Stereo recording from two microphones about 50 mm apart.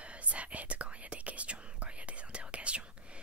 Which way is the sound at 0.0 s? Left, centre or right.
Right.